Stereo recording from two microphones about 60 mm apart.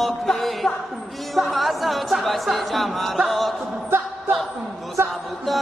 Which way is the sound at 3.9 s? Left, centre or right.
Right.